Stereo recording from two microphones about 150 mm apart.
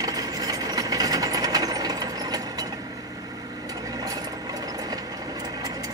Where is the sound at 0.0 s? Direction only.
25° right (ahead or behind).